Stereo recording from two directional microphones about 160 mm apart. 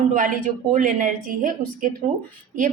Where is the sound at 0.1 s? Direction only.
55° right (ahead or behind).